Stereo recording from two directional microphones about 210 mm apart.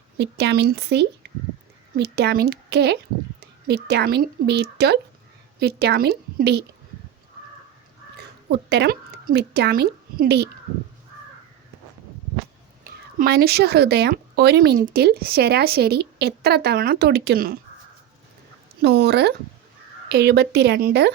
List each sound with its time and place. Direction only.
0.2 s a woman's voice: 55° right (ahead or behind)
8.1 s a woman's voice: 55° right (ahead or behind)
12.8 s a woman's voice: 45° right (ahead or behind)
18.8 s a woman's voice: 50° right (ahead or behind)